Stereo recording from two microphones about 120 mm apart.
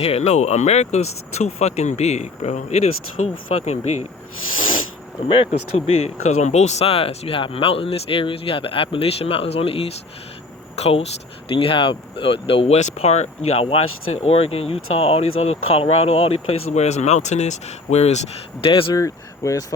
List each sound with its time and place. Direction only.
0.0 s speech: 65° left (ahead or behind)
3.2 s speech: 75° left (ahead or behind)
3.5 s speech: 60° left (ahead or behind)
5.3 s speech: 55° left (ahead or behind)
18.6 s speech: 45° left (ahead or behind)
18.9 s speech: 25° left (ahead or behind)